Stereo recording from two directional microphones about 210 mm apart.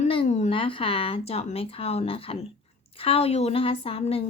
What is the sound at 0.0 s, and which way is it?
Speech, 30° left (ahead or behind).